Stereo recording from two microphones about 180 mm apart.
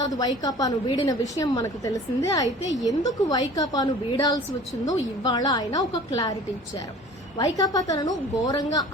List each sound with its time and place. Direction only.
0.0 s a woman's voice: 20° left (ahead or behind)
7.3 s a woman's voice: 20° left (ahead or behind)